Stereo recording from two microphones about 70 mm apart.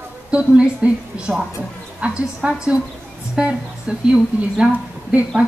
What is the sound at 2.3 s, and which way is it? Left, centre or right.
A woman's voice, centre.